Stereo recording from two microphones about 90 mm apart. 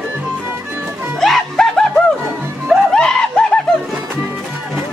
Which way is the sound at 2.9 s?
10° left (ahead or behind).